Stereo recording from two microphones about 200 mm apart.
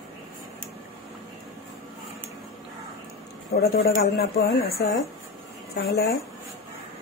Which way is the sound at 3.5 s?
55° left (ahead or behind).